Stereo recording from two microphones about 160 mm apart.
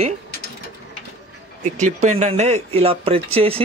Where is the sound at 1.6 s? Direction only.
45° right (ahead or behind).